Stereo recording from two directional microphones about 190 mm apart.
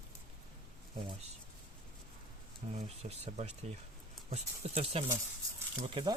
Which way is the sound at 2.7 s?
35° right (ahead or behind).